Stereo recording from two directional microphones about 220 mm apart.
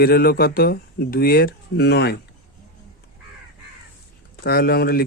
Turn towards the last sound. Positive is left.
turn(degrees=45)  # may be behind; listen again after turning